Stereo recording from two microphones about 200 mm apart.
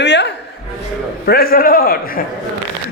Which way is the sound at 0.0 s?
60° left (ahead or behind).